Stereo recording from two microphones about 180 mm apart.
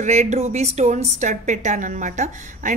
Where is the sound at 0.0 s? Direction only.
40° right (ahead or behind).